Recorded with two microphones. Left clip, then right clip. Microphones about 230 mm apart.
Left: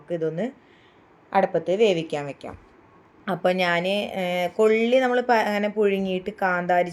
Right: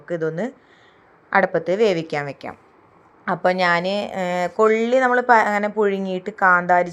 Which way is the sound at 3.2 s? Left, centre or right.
Centre.